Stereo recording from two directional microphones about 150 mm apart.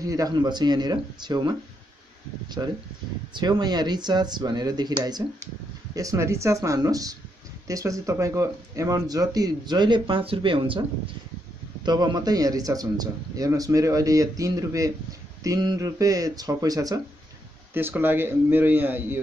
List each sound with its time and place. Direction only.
0.0 s speech: 25° right (ahead or behind)
11.8 s speech: 30° right (ahead or behind)
17.7 s speech: 15° right (ahead or behind)